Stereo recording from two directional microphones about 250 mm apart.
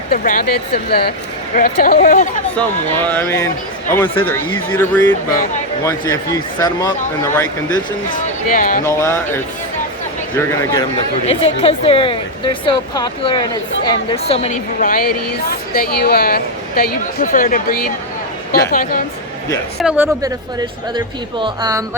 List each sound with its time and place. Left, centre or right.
0.1 s a woman's voice: left
2.6 s a man's voice: centre
8.1 s speech: left
8.9 s a man's voice: centre
10.3 s a man's voice: centre
11.3 s a woman's voice: left
19.8 s speech: centre
20.9 s speech: centre